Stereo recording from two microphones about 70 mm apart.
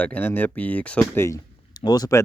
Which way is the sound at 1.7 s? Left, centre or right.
Left.